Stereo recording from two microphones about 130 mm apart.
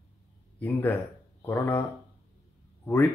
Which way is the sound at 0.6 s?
15° left (ahead or behind).